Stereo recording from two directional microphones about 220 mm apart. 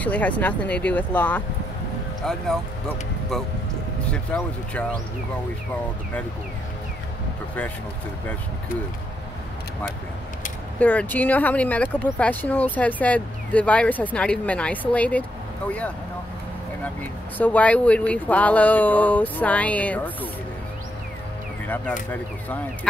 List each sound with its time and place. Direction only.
0.0 s speech: 5° left (ahead or behind)
4.1 s speech: 5° left (ahead or behind)
10.8 s speech: 5° left (ahead or behind)
16.8 s speech: 5° left (ahead or behind)
21.6 s speech: 10° left (ahead or behind)